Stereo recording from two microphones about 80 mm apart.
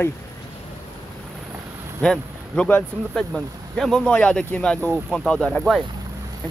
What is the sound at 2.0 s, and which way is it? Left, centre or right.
Speech, centre.